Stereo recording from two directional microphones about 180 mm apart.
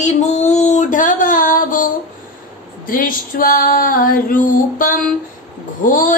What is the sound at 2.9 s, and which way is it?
Female singing, 50° left (ahead or behind).